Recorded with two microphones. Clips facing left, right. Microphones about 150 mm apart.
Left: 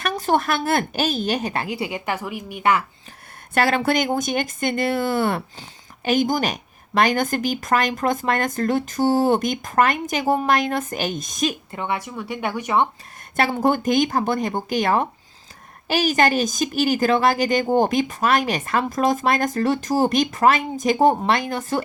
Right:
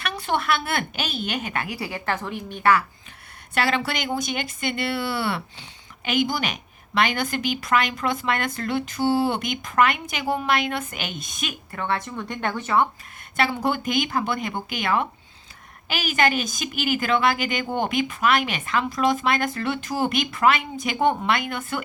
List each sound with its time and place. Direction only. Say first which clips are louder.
0.0 s a woman's voice: left 5 dB; 45° left (ahead or behind); by 2.7 s 10° left (ahead or behind)
3.5 s speech: left 5 dB; 45° left (ahead or behind)
11.7 s speech: left 1 dB; 15° left (ahead or behind)
13.3 s a woman's voice: left 4 dB; 45° left (ahead or behind)